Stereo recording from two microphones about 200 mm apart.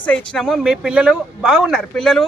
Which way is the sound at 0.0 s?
5° left (ahead or behind).